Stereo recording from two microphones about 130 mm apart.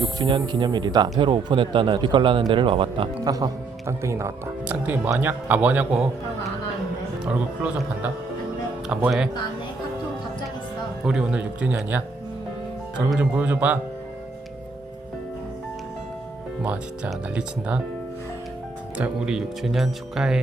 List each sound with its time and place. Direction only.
0.2 s a man's voice: 35° right (ahead or behind)
3.3 s a man's voice: 25° right (ahead or behind)
7.3 s speech: 10° right (ahead or behind)
8.9 s speech: 5° right (ahead or behind)
11.0 s speech: 5° right (ahead or behind)
13.1 s speech: 10° right (ahead or behind)
16.6 s speech: 10° right (ahead or behind)
18.9 s speech: 10° right (ahead or behind)